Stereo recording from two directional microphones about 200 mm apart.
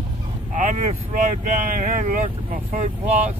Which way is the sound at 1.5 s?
40° right (ahead or behind).